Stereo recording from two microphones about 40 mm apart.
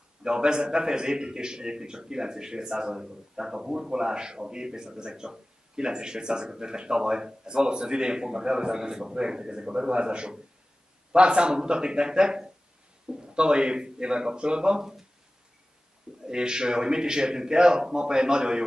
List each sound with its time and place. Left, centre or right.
0.2 s a man's voice: right
16.3 s a man's voice: centre